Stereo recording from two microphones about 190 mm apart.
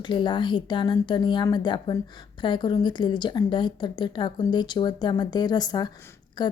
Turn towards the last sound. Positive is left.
turn(degrees=25)  # may be behind; listen again after turning